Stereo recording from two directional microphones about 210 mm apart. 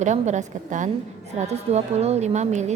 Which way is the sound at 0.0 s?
35° right (ahead or behind).